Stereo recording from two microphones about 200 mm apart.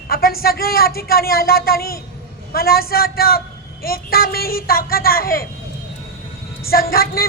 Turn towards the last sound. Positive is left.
turn(degrees=50)  # may be behind; listen again after turning